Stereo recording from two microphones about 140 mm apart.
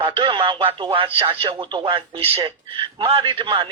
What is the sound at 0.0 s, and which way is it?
Speech, 35° right (ahead or behind).